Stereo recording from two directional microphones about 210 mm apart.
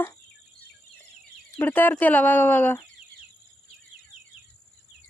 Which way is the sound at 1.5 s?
10° left (ahead or behind).